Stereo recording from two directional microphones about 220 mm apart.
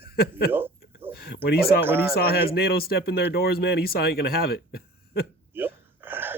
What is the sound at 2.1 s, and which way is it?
Speech, 45° left (ahead or behind).